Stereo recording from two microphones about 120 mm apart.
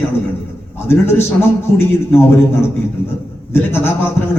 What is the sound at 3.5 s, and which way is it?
Speech, 20° left (ahead or behind).